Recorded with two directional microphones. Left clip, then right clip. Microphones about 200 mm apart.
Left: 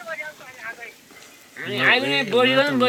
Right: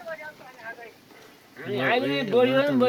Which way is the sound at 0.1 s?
10° right (ahead or behind).